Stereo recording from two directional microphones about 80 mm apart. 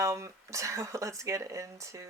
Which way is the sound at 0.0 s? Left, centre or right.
Right.